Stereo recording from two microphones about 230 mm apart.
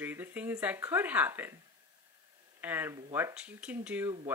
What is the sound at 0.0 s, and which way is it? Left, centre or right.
Speech, centre.